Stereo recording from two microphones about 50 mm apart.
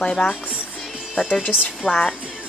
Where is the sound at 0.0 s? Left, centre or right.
Centre.